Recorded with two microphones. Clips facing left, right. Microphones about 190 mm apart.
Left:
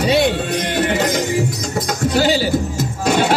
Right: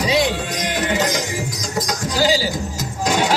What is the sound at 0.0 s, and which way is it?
Music, 65° left (ahead or behind).